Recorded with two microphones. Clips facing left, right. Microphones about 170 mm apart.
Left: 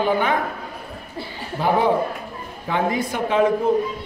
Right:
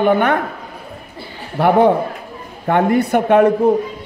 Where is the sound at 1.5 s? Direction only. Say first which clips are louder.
Right 6 dB; 65° right (ahead or behind).